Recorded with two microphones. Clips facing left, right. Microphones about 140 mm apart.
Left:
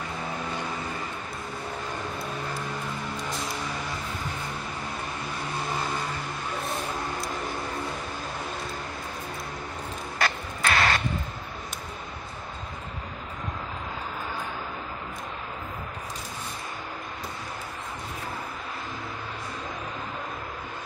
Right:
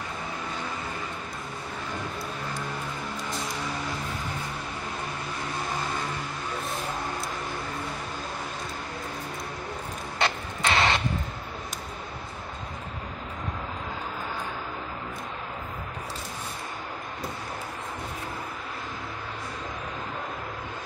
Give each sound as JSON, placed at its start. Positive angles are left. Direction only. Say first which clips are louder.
{"t": 10.1, "sound": "vehicle", "louder": "right 1 dB", "side_deg": -25}